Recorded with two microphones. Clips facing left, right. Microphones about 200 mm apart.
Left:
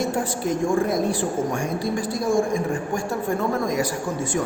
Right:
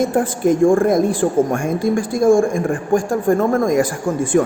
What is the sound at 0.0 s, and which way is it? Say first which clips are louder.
A man's voice: right 8 dB; 50° right (ahead or behind).